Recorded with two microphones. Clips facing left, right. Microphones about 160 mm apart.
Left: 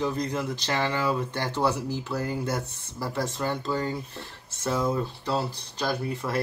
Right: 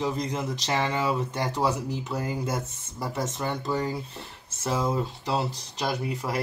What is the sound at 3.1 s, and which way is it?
Speech, 20° right (ahead or behind).